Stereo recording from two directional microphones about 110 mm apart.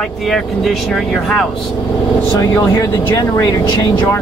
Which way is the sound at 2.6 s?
35° left (ahead or behind).